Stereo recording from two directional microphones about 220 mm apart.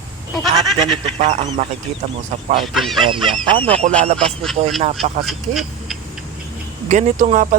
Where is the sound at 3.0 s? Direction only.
25° right (ahead or behind).